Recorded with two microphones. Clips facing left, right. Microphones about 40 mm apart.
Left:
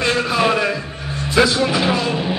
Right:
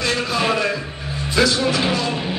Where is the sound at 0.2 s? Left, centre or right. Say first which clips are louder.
Left 3 dB; centre.